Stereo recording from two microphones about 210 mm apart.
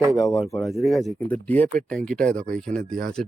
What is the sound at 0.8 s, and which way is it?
Speech, centre (ahead or behind).